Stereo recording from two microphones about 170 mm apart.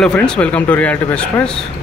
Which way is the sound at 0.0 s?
5° left (ahead or behind).